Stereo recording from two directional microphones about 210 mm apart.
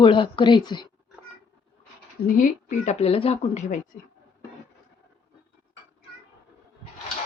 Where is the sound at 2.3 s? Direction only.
35° left (ahead or behind).